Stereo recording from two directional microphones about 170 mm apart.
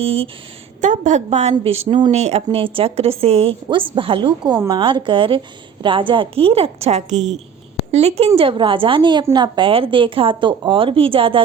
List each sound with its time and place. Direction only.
0.0 s a woman's voice: 35° right (ahead or behind)
0.8 s a woman's voice: 45° right (ahead or behind)